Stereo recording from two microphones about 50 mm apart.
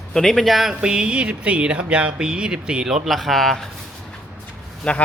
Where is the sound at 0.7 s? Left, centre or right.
Centre.